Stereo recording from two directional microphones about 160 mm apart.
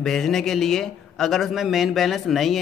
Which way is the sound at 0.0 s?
Centre (ahead or behind).